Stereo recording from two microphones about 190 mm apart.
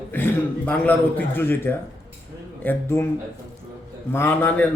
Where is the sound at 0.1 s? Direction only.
10° left (ahead or behind).